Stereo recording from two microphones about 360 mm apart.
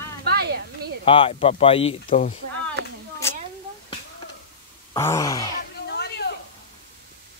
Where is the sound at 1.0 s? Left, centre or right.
Centre.